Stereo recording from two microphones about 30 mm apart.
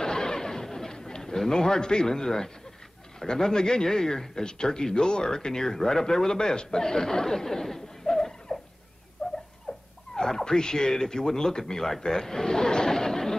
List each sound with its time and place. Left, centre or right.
0.0 s a sound: centre
2.2 s speech: centre
8.5 s turkey: left
9.2 s a sound: left
9.7 s dog: left
10.1 s a man's voice: left